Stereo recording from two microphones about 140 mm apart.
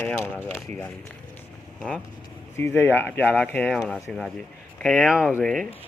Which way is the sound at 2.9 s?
15° left (ahead or behind).